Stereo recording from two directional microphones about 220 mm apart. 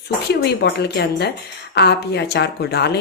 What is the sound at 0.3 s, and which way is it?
Speech, 50° left (ahead or behind).